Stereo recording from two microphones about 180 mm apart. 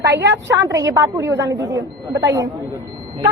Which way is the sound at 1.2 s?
85° right.